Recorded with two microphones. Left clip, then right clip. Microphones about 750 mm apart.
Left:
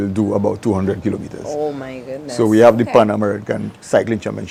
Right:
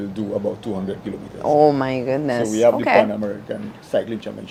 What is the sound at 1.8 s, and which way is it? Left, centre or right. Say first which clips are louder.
Speech: right 7 dB; right.